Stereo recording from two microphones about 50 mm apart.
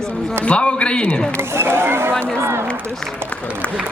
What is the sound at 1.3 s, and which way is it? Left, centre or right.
Speech, right.